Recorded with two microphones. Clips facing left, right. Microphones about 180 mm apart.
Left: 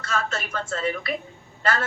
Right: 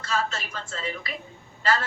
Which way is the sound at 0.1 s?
55° left (ahead or behind).